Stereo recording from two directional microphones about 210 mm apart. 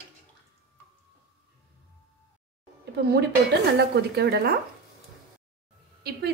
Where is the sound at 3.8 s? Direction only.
50° right (ahead or behind).